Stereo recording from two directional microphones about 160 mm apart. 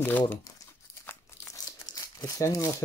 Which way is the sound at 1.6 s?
20° left (ahead or behind).